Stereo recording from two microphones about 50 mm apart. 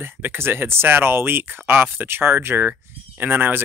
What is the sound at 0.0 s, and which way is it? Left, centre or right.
Speech, right.